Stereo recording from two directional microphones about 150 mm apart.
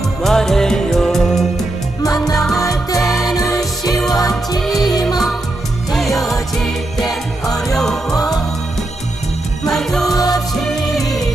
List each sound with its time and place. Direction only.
0.2 s music: centre (ahead or behind)
2.6 s music: 20° left (ahead or behind)
3.1 s music: centre (ahead or behind)
3.3 s music: 20° left (ahead or behind)
4.6 s music: centre (ahead or behind)
5.9 s music: centre (ahead or behind)
7.7 s music: 5° left (ahead or behind)
8.1 s music: 25° left (ahead or behind)
9.6 s music: 5° left (ahead or behind)
10.2 s music: 25° left (ahead or behind)
10.6 s music: centre (ahead or behind)